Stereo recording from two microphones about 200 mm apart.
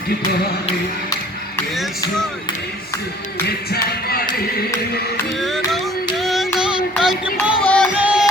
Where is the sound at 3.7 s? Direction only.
50° left (ahead or behind).